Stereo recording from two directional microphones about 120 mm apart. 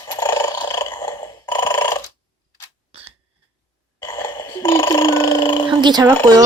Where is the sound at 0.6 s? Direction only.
35° left (ahead or behind).